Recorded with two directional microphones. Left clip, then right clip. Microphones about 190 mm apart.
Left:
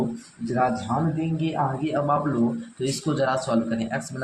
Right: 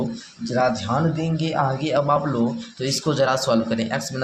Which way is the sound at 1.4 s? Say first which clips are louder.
Right 4 dB; 20° right (ahead or behind).